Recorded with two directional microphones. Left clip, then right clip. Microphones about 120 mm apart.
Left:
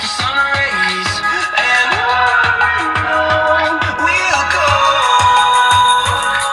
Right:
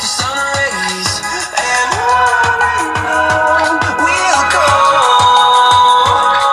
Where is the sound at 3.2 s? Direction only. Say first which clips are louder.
Right 3 dB; 35° right (ahead or behind).